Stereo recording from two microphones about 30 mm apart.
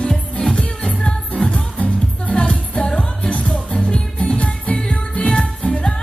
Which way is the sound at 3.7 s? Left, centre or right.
Left.